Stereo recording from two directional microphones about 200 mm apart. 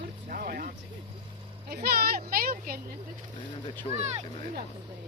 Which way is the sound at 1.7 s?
50° right (ahead or behind).